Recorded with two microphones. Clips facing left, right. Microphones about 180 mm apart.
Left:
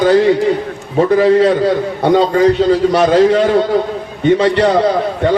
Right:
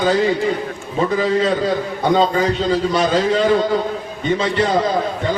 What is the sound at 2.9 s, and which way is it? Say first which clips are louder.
A man's voice: left 7 dB; 60° left (ahead or behind).